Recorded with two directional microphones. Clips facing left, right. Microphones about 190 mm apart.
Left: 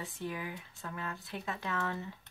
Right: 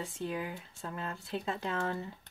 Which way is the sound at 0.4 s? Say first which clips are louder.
Right 3 dB; 30° right (ahead or behind).